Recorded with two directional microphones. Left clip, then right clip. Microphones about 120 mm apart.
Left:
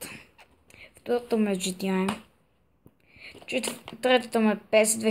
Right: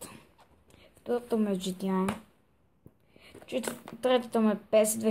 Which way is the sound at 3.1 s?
5° right (ahead or behind).